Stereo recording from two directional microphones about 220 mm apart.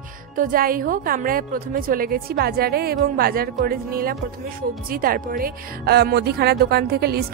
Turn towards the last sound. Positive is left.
turn(degrees=-45)  # may be behind; listen again after turning